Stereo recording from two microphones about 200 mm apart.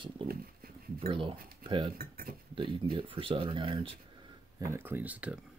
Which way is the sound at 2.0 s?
50° right (ahead or behind).